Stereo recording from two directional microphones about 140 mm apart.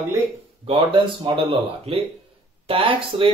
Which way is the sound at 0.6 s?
40° right (ahead or behind).